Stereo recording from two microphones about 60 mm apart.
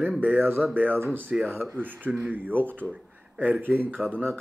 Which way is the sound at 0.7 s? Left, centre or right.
Right.